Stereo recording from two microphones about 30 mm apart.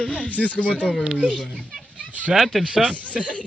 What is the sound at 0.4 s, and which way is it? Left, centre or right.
Speech, left.